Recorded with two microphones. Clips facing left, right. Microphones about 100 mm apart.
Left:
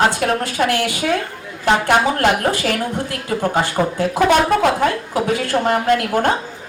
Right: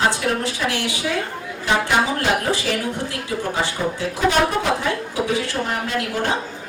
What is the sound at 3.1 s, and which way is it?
Speech, 50° left (ahead or behind).